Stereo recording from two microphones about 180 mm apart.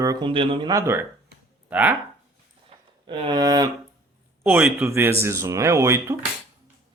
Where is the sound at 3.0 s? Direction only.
30° right (ahead or behind).